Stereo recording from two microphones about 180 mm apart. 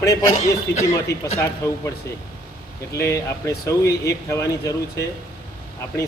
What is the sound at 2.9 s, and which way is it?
A man's voice, 15° left (ahead or behind).